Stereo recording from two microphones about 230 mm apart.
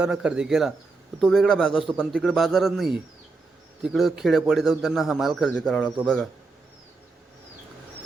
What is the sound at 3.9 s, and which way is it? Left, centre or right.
A man's voice, centre.